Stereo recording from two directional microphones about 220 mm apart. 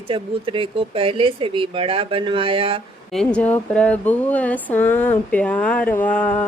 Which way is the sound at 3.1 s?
5° left (ahead or behind).